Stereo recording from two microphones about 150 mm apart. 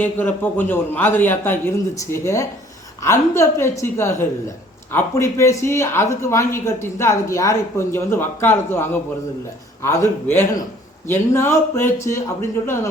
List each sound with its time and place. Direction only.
0.0 s speech: 10° left (ahead or behind)